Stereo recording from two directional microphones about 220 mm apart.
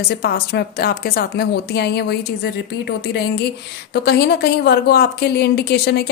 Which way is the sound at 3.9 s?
50° left (ahead or behind).